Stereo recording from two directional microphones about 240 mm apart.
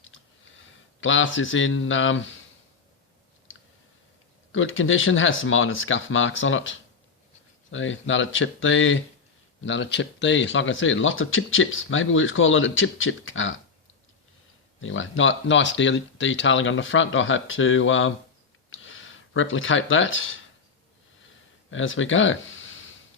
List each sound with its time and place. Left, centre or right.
0.1 s a sound: left
3.5 s clicking: left
4.5 s speech: left
14.8 s speech: left
21.7 s speech: left